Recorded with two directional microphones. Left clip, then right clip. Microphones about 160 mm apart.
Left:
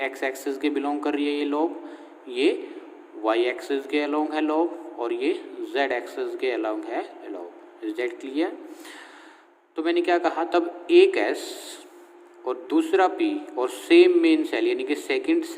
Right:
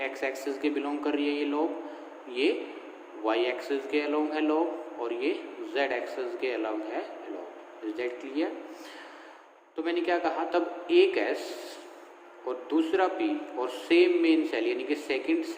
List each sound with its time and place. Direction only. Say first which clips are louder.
0.0 s a man's voice: left 4 dB; 75° left (ahead or behind)
9.7 s a man's voice: left 6 dB; 80° left